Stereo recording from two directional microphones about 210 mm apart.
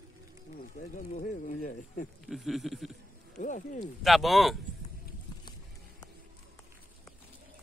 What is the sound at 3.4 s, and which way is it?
Speech, 35° left (ahead or behind).